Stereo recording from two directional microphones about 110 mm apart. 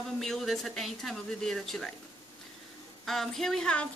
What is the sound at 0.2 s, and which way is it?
Speech, 5° left (ahead or behind).